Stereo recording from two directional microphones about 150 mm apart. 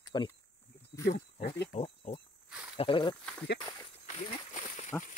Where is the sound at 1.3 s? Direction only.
90° left.